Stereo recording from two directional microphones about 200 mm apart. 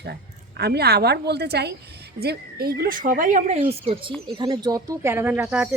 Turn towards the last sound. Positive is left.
turn(degrees=-5)  # may be behind; listen again after turning